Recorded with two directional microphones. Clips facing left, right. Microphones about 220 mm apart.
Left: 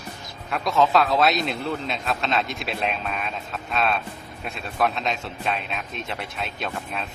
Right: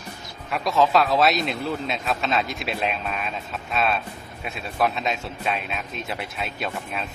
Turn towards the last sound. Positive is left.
turn(degrees=-5)  # may be behind; listen again after turning